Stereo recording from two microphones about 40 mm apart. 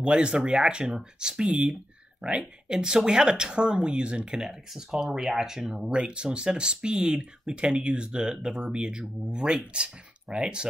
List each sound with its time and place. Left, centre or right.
0.0 s speech: right
4.4 s speech: centre
5.9 s speech: right